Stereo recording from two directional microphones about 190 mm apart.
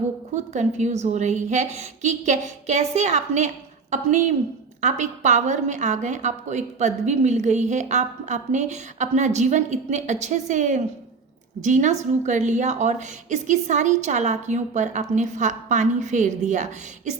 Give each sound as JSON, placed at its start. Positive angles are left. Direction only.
{"t": 0.3, "sound": "a woman's voice", "side_deg": -40}